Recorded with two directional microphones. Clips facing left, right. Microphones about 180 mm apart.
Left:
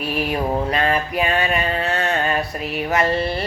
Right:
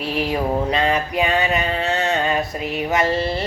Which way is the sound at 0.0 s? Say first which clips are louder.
Right 1 dB; 25° right (ahead or behind).